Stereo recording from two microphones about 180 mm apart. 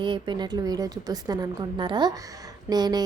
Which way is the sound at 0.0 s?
25° right (ahead or behind).